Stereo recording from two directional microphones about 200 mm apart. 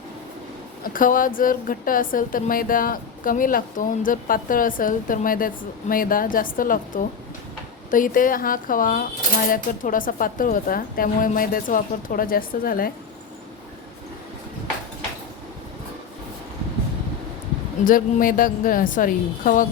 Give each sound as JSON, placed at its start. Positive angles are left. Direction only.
{"t": 0.9, "sound": "speech", "side_deg": 45}
{"t": 17.8, "sound": "speech", "side_deg": 45}